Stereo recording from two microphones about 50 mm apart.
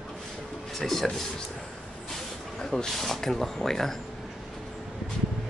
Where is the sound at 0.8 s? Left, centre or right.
Centre.